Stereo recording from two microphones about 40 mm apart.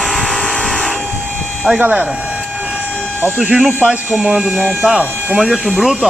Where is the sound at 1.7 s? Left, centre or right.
Right.